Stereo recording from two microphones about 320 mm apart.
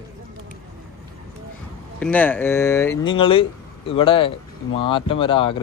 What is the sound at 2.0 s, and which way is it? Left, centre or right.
A man's voice, centre.